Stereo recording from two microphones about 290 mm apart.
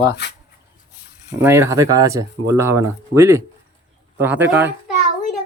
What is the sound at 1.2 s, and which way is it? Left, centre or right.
A child's voice, centre.